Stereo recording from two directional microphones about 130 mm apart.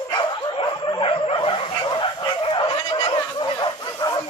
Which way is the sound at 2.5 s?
40° left (ahead or behind).